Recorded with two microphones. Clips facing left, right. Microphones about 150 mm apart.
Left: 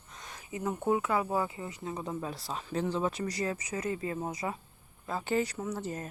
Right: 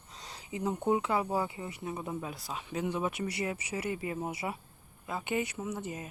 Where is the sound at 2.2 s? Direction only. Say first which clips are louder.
Left 2 dB; 5° right (ahead or behind).